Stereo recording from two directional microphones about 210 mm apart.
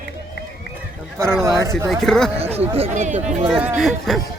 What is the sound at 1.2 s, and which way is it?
Speech, 10° right (ahead or behind).